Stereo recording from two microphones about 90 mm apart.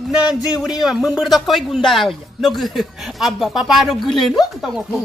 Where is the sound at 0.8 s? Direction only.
5° right (ahead or behind).